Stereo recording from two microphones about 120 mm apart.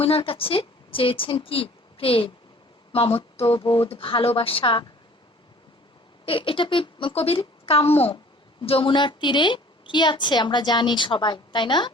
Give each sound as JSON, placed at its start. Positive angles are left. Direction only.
{"t": 0.0, "sound": "a woman's voice", "side_deg": 50}
{"t": 6.2, "sound": "a woman's voice", "side_deg": 45}